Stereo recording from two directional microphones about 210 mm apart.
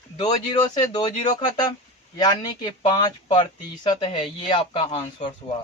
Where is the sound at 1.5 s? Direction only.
20° left (ahead or behind).